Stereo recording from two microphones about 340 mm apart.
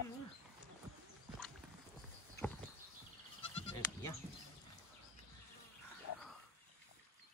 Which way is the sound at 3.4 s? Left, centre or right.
Centre.